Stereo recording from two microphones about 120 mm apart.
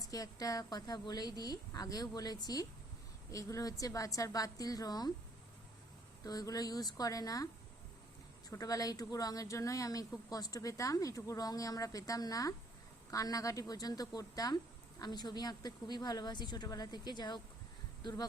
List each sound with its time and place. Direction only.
0.0 s a woman's voice: 30° left (ahead or behind)
6.2 s a woman's voice: 30° left (ahead or behind)
8.4 s a woman's voice: 30° left (ahead or behind)